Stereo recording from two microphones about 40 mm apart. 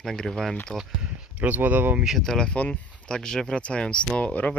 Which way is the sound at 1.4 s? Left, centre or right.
Right.